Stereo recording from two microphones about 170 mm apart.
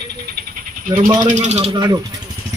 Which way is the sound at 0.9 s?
30° right (ahead or behind).